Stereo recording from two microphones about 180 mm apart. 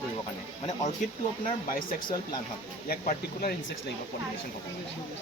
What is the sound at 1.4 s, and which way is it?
Speech, 50° left (ahead or behind).